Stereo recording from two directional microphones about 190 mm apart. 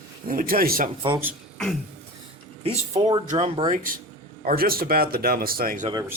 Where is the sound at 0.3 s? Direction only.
50° right (ahead or behind).